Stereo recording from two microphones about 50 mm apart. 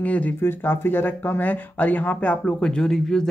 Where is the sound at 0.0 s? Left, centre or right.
Left.